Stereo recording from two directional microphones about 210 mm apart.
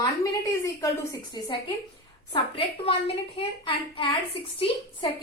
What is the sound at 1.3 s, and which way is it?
A woman's voice, 20° left (ahead or behind).